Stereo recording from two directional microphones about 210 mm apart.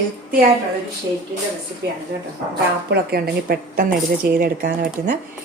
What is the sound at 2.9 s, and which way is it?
Speech, 45° right (ahead or behind).